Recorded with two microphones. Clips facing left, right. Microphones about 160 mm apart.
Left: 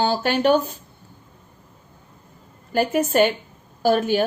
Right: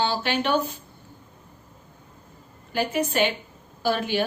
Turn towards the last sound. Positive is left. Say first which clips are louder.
# left 6 dB
turn(degrees=45)  # may be behind; listen again after turning